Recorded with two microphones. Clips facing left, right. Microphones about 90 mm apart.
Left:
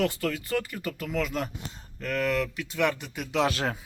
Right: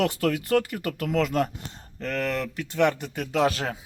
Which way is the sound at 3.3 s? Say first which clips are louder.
Right 2 dB; 30° right (ahead or behind).